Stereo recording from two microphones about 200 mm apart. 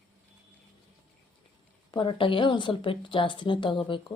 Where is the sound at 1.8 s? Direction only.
25° left (ahead or behind).